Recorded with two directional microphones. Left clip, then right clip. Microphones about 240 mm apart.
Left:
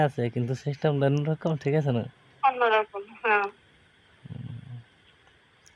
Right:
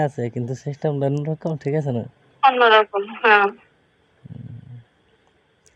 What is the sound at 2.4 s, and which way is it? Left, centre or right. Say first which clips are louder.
A woman's voice: right 9 dB; right.